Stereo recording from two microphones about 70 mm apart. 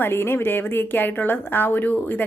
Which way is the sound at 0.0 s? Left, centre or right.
Left.